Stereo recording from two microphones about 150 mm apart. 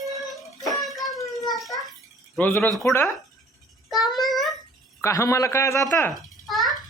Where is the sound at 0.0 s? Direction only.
Centre (ahead or behind).